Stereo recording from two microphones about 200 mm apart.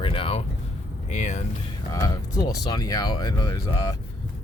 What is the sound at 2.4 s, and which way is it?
Speech, 20° left (ahead or behind).